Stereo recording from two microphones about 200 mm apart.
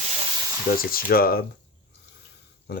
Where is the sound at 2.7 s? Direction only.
50° left (ahead or behind).